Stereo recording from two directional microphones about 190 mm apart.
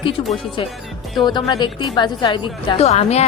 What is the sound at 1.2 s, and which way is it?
A woman's voice, 25° left (ahead or behind).